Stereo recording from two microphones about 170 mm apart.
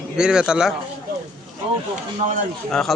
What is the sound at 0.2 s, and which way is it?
Speech, 5° right (ahead or behind).